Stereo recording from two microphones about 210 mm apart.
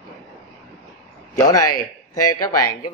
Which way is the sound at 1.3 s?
15° left (ahead or behind).